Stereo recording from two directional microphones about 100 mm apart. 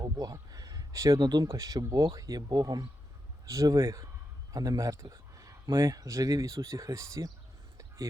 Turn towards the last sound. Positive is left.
turn(degrees=-30)  # may be behind; listen again after turning